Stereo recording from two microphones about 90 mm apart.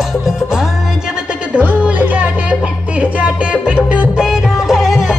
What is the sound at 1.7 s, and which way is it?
Music, 15° right (ahead or behind).